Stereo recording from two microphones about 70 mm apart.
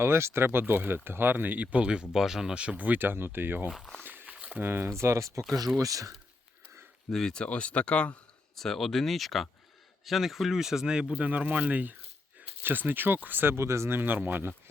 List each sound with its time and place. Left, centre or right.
0.0 s speech: right
4.0 s a sound: right
4.5 s speech: right
7.1 s speech: centre
8.5 s speech: centre
11.3 s speech: right